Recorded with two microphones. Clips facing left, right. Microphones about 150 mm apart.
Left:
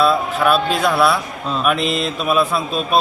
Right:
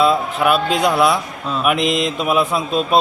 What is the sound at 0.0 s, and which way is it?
A man's voice, 20° right (ahead or behind).